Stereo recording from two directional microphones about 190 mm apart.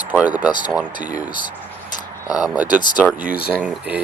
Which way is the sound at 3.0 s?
5° right (ahead or behind).